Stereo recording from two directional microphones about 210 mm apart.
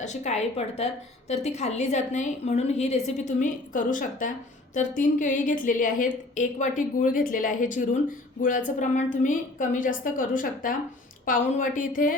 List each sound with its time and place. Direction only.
0.0 s a woman's voice: 35° left (ahead or behind)